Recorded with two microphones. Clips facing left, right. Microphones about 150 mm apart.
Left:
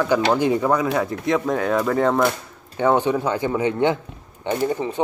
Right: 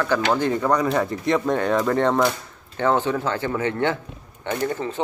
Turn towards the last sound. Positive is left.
turn(degrees=15)  # may be behind; listen again after turning